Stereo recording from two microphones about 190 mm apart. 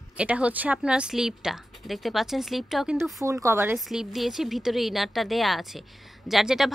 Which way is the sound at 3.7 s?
Centre (ahead or behind).